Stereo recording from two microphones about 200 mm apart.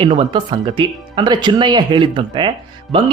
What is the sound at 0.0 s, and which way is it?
Speech, 25° right (ahead or behind).